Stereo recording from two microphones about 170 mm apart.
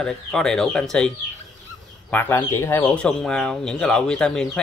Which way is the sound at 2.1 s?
15° left (ahead or behind).